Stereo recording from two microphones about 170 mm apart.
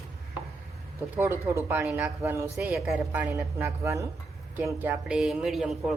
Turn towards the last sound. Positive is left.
turn(degrees=0)  # may be behind; listen again after turning